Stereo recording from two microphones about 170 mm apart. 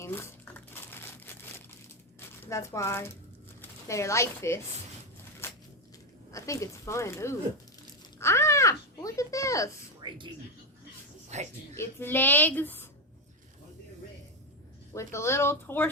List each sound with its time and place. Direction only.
0.0 s crumpling: 15° left (ahead or behind)
2.1 s speech: 15° left (ahead or behind)
5.4 s a sound: 15° left (ahead or behind)
6.3 s a woman's voice: 20° left (ahead or behind)
8.2 s a sound: 15° left (ahead or behind)
10.0 s a sound: 25° right (ahead or behind)
11.3 s speech: 40° right (ahead or behind)
11.8 s a woman's voice: 15° left (ahead or behind)
14.9 s a woman's voice: 15° left (ahead or behind)